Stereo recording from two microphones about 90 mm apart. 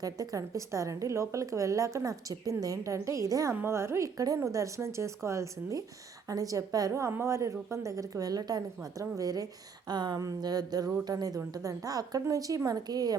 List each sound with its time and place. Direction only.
0.0 s a woman's voice: 45° right (ahead or behind)
3.5 s a woman's voice: 25° right (ahead or behind); by 13.1 s 45° right (ahead or behind)